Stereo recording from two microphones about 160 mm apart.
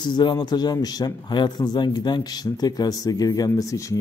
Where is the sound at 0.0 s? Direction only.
30° left (ahead or behind).